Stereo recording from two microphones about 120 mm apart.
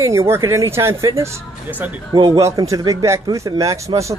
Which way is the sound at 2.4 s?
25° right (ahead or behind).